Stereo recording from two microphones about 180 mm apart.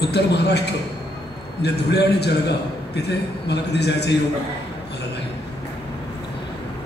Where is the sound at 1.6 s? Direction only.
65° left (ahead or behind).